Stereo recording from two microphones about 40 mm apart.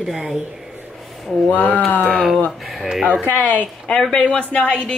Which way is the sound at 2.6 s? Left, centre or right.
Centre.